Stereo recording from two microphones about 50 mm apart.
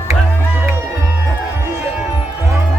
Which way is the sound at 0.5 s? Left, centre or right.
Right.